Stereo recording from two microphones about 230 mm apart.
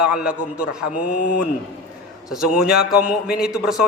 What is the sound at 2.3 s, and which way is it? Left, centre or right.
A man's voice, centre.